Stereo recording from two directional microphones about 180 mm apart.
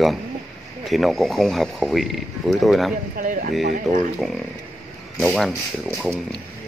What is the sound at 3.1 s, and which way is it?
Speech, 45° right (ahead or behind).